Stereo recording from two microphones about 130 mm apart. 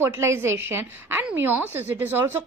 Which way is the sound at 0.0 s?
20° right (ahead or behind).